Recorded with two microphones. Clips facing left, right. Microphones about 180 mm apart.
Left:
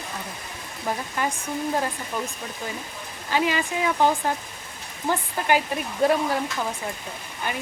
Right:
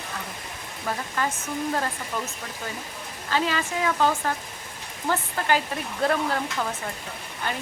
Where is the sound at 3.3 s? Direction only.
15° left (ahead or behind).